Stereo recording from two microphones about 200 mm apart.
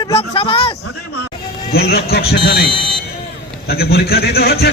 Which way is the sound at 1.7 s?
50° left (ahead or behind).